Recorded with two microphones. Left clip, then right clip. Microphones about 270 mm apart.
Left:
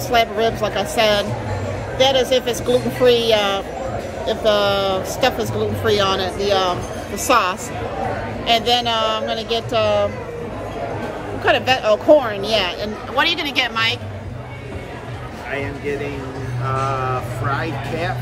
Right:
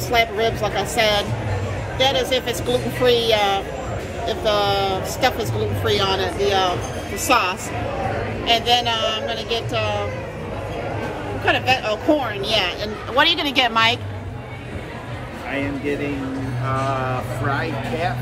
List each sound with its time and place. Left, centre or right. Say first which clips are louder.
0.1 s a woman's voice: left 2 dB; centre
6.1 s speech: even; left
7.2 s a woman's voice: left 2 dB; centre
11.4 s a woman's voice: left 3 dB; centre